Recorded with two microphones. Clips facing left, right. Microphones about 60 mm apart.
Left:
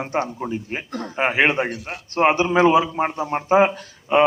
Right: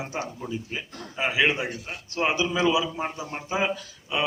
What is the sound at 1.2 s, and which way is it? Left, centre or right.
A man's voice, left.